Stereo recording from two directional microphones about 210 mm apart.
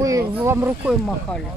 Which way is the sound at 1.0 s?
5° left (ahead or behind).